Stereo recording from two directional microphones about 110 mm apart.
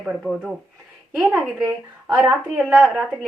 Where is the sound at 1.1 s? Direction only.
10° right (ahead or behind).